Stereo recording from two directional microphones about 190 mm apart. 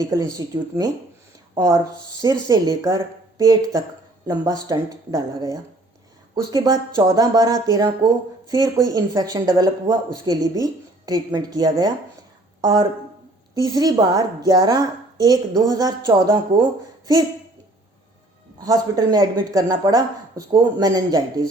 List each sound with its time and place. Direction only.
0.1 s speech: 20° right (ahead or behind)
18.6 s speech: 20° right (ahead or behind)